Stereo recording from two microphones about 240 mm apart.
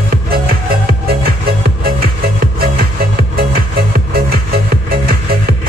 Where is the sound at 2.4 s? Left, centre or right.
Right.